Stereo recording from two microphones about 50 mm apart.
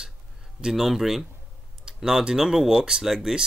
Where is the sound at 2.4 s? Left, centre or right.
Centre.